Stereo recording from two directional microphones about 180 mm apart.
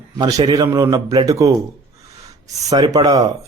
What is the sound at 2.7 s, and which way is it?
Speech, 20° right (ahead or behind).